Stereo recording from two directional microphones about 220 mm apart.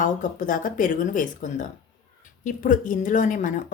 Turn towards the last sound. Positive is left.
turn(degrees=35)  # may be behind; listen again after turning